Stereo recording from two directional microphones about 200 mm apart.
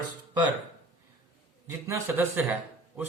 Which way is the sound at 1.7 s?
15° right (ahead or behind).